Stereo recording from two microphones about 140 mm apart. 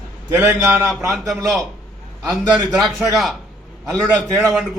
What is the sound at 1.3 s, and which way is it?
Speech, centre (ahead or behind).